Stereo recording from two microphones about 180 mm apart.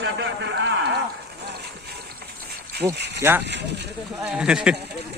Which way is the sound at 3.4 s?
70° right (ahead or behind).